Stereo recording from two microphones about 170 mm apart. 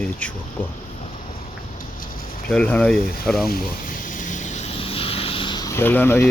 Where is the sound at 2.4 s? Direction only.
5° left (ahead or behind).